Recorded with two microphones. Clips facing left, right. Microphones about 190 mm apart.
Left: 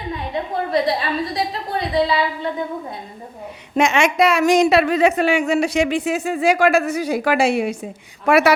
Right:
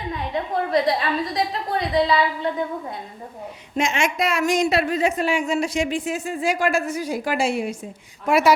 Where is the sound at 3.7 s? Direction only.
70° left (ahead or behind).